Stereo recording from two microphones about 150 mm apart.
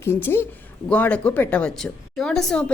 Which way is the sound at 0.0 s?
15° left (ahead or behind).